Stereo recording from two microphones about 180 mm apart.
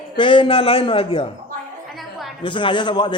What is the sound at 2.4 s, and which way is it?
Speech, 25° left (ahead or behind).